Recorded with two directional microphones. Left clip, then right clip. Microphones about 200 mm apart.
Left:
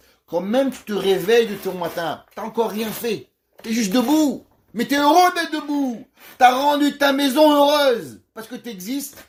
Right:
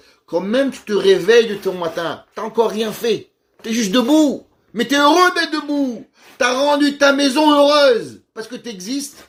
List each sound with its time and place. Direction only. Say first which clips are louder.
0.3 s speech: right 2 dB; 30° left (ahead or behind)